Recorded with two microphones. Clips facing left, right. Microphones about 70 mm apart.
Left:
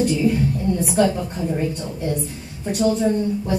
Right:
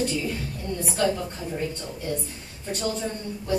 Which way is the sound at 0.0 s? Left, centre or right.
Centre.